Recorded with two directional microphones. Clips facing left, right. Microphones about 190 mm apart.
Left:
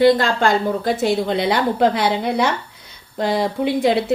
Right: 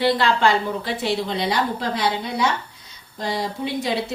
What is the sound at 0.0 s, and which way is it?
A woman's voice, 45° left (ahead or behind).